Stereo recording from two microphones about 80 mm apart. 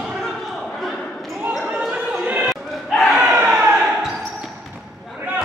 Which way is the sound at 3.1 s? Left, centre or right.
Centre.